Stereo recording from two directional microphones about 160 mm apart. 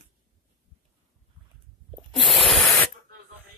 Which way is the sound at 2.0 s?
Centre (ahead or behind).